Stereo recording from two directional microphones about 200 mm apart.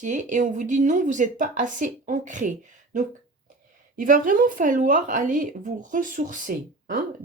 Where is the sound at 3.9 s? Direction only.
40° right (ahead or behind).